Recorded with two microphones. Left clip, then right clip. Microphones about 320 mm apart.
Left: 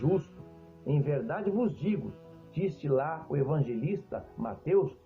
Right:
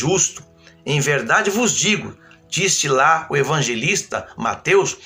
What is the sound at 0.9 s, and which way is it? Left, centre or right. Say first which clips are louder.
Speech: right 16 dB; left.